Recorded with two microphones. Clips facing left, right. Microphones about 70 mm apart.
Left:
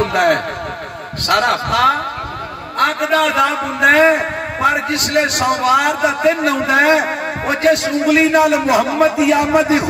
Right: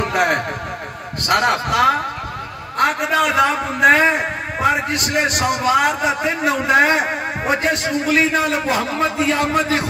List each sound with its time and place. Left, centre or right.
0.0 s a man's voice: centre